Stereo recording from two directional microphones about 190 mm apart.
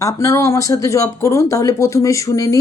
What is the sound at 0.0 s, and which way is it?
Speech, 15° left (ahead or behind).